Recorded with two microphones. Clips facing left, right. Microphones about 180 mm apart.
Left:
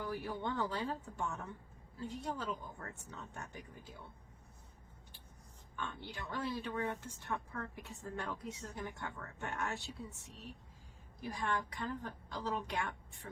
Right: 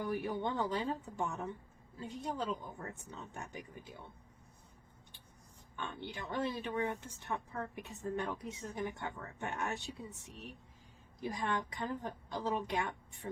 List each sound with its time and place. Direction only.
0.0 s speech: 15° right (ahead or behind)
5.7 s speech: 20° right (ahead or behind)